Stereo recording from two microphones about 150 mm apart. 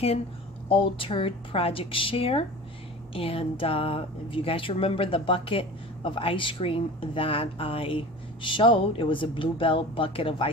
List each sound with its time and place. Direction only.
0.7 s speech: 35° left (ahead or behind)